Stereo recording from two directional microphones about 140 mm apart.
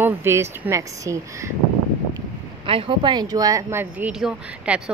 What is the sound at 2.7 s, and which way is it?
Speech, 40° right (ahead or behind).